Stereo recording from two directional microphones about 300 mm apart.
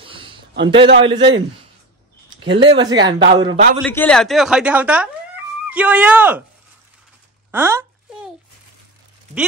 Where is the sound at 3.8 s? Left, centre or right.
Centre.